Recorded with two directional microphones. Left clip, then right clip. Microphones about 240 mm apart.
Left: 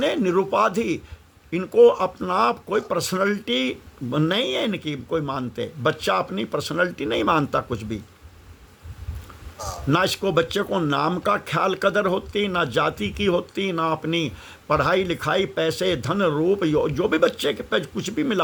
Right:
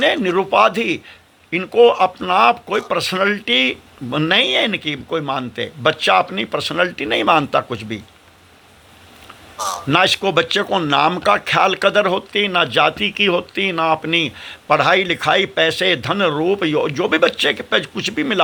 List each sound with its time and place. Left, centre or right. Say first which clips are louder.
0.0 s a man's voice: right 5 dB; centre
9.9 s speech: right 6 dB; centre